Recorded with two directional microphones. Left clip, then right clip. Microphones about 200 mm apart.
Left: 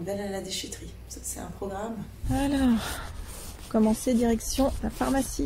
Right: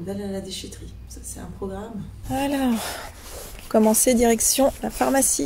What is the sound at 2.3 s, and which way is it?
Speech, 15° right (ahead or behind).